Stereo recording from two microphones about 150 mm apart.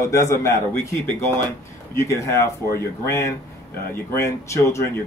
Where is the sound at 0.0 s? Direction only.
20° left (ahead or behind).